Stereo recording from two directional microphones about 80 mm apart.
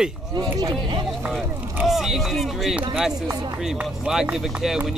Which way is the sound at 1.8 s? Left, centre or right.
Centre.